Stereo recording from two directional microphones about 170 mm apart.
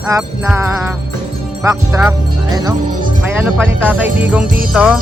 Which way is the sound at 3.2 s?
10° right (ahead or behind).